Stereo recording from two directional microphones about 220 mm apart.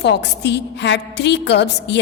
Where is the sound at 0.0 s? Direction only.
50° left (ahead or behind).